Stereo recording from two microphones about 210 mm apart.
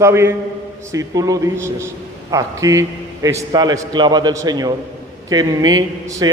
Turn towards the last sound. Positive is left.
turn(degrees=-20)  # may be behind; listen again after turning